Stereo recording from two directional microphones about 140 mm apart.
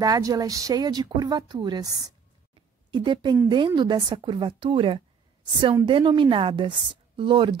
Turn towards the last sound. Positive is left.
turn(degrees=-35)  # may be behind; listen again after turning